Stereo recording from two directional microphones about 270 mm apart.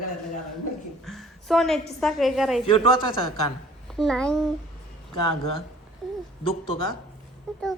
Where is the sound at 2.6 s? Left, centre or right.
Left.